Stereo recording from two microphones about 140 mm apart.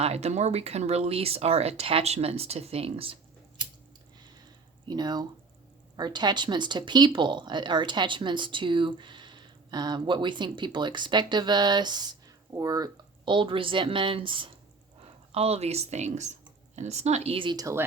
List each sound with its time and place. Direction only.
0.0 s speech: 50° right (ahead or behind)
4.9 s speech: 30° right (ahead or behind)